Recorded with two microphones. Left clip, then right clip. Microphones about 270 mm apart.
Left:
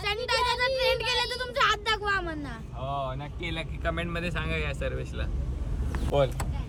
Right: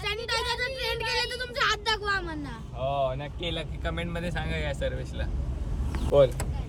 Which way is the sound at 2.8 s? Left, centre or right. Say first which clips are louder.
Right 5 dB; right.